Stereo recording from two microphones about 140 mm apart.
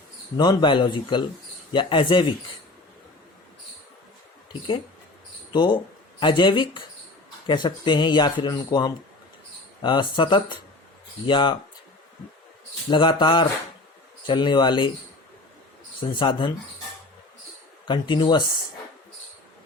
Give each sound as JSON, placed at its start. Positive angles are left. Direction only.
{"t": 0.3, "sound": "speech", "side_deg": 30}
{"t": 5.5, "sound": "speech", "side_deg": 30}
{"t": 12.9, "sound": "speech", "side_deg": 35}
{"t": 16.1, "sound": "speech", "side_deg": 35}
{"t": 17.8, "sound": "speech", "side_deg": 35}